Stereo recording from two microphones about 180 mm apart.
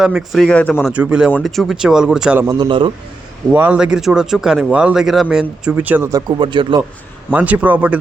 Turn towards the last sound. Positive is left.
turn(degrees=-10)  # may be behind; listen again after turning